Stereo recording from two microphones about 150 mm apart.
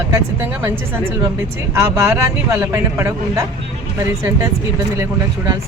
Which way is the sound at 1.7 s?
15° right (ahead or behind).